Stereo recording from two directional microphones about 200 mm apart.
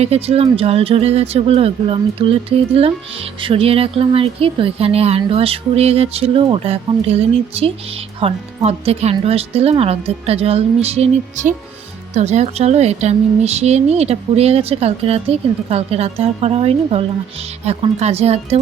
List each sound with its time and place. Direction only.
0.0 s a woman's voice: 30° right (ahead or behind)
3.4 s a woman's voice: 30° right (ahead or behind)